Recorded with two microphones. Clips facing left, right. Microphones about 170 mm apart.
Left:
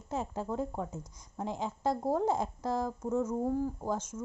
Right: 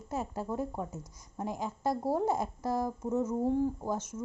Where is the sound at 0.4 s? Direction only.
10° right (ahead or behind).